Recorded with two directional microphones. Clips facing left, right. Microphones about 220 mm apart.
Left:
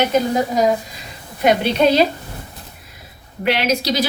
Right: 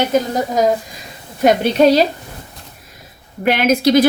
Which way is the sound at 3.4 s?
50° right (ahead or behind).